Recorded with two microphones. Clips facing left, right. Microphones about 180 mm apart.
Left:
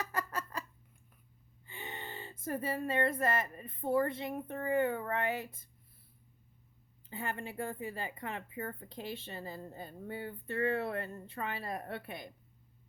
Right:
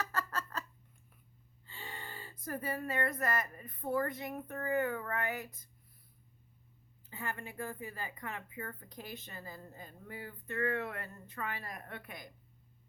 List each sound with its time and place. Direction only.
0.0 s a sound: 15° left (ahead or behind)
1.6 s speech: 20° left (ahead or behind)
7.1 s speech: 30° left (ahead or behind)